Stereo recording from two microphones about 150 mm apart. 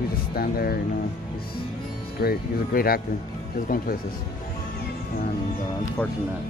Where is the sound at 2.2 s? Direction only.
75° left (ahead or behind).